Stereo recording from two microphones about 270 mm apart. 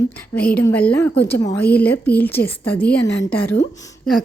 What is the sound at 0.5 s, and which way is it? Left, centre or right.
Speech, centre.